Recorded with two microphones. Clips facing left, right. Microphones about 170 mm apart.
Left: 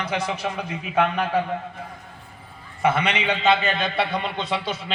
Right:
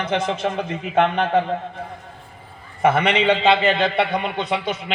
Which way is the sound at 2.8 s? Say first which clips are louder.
Right 5 dB; 55° right (ahead or behind).